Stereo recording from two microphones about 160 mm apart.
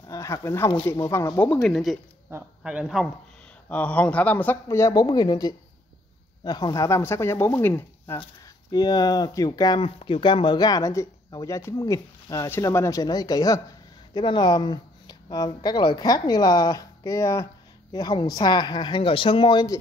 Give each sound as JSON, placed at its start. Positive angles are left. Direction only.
{"t": 0.1, "sound": "speech", "side_deg": 20}
{"t": 1.4, "sound": "speech", "side_deg": 10}
{"t": 1.7, "sound": "speech", "side_deg": 0}
{"t": 3.6, "sound": "speech", "side_deg": 10}
{"t": 8.7, "sound": "speech", "side_deg": 25}
{"t": 9.8, "sound": "speech", "side_deg": 35}